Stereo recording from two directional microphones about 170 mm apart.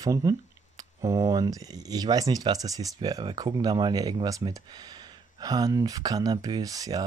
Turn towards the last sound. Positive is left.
turn(degrees=-20)  # may be behind; listen again after turning